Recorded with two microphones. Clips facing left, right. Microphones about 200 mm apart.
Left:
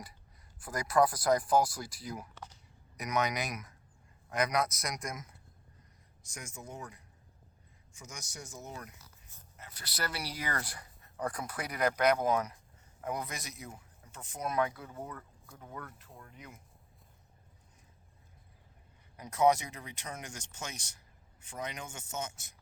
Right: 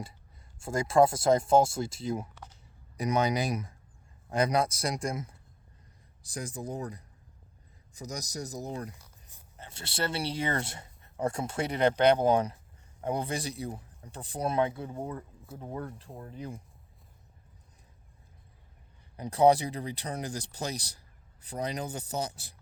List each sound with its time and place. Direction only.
0.6 s speech: 25° right (ahead or behind)
19.1 s speech: 30° right (ahead or behind)